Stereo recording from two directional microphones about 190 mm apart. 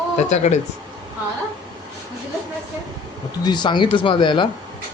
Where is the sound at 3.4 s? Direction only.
25° left (ahead or behind).